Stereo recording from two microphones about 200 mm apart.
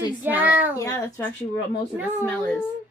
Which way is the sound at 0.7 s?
15° left (ahead or behind).